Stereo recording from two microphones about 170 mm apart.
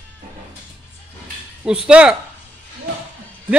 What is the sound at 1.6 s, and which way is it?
Speech, 5° right (ahead or behind).